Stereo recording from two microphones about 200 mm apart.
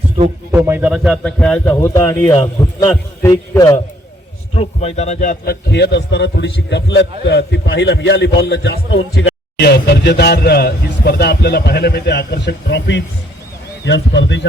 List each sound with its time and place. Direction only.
0.5 s a man's voice: 10° right (ahead or behind); by 3.8 s 15° left (ahead or behind)
4.5 s a man's voice: 30° left (ahead or behind); by 14.4 s 65° left (ahead or behind)